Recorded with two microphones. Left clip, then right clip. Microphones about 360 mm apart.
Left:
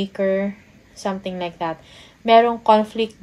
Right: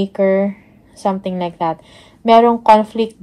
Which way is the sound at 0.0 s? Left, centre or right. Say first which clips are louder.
Right 6 dB; right.